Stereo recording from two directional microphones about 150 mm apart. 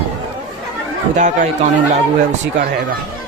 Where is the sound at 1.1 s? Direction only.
55° right (ahead or behind).